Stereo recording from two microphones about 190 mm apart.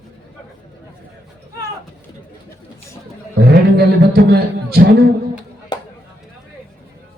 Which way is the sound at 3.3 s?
60° right (ahead or behind).